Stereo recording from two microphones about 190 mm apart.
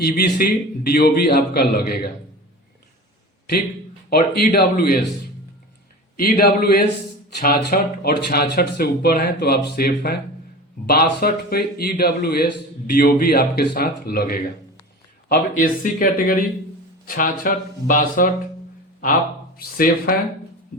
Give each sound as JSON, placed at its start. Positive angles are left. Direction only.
{"t": 0.0, "sound": "speech", "side_deg": 55}
{"t": 4.1, "sound": "speech", "side_deg": 55}
{"t": 6.1, "sound": "speech", "side_deg": 50}
{"t": 19.5, "sound": "speech", "side_deg": 50}